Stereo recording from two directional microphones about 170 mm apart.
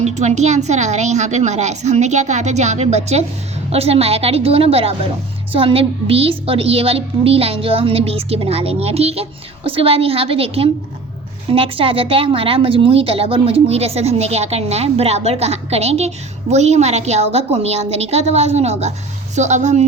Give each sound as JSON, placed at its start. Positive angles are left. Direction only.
{"t": 0.0, "sound": "a woman's voice", "side_deg": -40}